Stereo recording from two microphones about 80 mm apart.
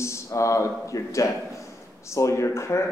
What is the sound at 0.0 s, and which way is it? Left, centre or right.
A man's voice, left.